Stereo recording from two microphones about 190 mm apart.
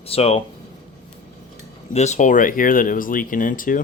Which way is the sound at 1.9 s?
35° left (ahead or behind).